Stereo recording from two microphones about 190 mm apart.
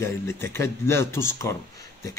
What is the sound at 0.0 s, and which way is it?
Speech, 15° left (ahead or behind).